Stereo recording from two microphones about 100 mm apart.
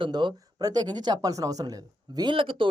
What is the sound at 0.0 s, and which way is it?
Speech, 50° right (ahead or behind).